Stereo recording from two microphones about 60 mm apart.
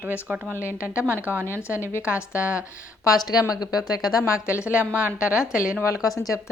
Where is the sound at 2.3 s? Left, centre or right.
Right.